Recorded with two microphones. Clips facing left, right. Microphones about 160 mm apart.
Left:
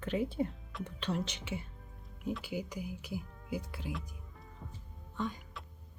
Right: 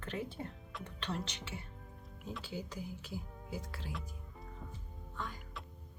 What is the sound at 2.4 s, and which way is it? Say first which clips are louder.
Speech: left 4 dB; 10° left (ahead or behind).